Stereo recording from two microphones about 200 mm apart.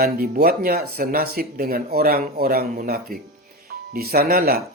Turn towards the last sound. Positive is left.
turn(degrees=-50)  # may be behind; listen again after turning